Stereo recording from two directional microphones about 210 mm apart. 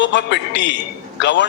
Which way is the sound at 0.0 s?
55° left (ahead or behind).